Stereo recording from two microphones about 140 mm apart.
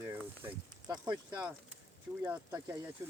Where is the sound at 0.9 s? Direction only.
30° right (ahead or behind).